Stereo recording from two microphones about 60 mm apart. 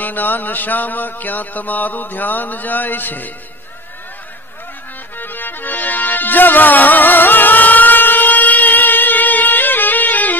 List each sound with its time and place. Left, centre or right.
0.0 s mantra: left
5.1 s music: left